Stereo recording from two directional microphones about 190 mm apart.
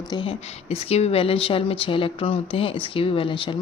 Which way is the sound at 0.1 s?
25° left (ahead or behind).